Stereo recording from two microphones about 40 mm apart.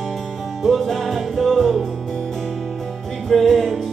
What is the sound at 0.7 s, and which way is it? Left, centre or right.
Music, centre.